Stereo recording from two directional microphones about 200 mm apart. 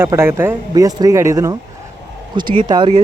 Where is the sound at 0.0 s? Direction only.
10° right (ahead or behind).